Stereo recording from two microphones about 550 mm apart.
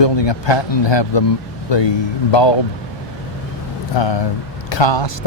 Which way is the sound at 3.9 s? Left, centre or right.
Left.